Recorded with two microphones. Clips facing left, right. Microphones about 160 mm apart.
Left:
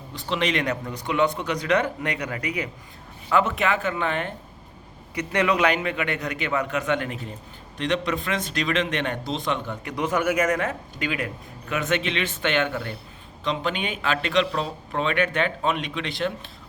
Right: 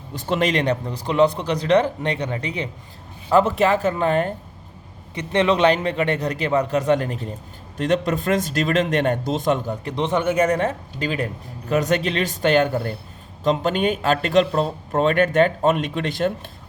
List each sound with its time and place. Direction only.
0.1 s a man's voice: 45° right (ahead or behind)
5.1 s a man's voice: 25° right (ahead or behind); by 16.5 s 45° right (ahead or behind)